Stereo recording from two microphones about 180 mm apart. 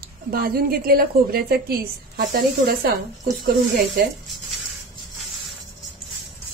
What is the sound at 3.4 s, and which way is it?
Speech, 55° right (ahead or behind).